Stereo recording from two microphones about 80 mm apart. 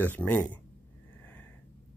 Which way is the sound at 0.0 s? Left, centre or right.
Left.